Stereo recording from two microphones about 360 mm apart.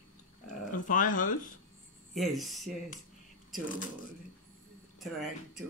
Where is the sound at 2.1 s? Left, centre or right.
Centre.